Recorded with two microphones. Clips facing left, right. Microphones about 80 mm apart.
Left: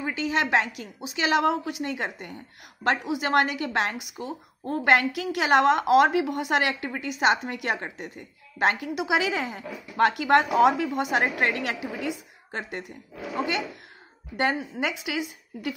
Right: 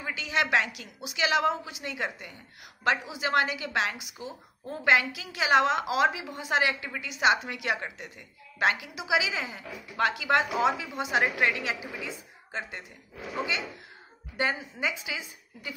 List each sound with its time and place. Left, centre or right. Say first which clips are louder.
0.0 s a woman's voice: left 3 dB; left
11.6 s a woman's voice: left 5 dB; left